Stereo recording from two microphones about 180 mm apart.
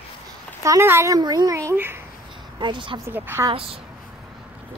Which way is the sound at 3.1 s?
15° right (ahead or behind).